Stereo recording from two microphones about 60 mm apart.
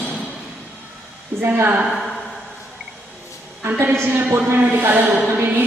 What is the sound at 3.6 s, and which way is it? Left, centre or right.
Speech, right.